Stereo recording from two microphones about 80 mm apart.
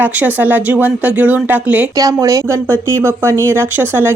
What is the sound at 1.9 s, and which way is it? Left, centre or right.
Speech, right.